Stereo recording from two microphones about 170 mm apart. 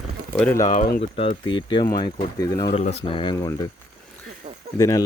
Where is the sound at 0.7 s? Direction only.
50° left (ahead or behind).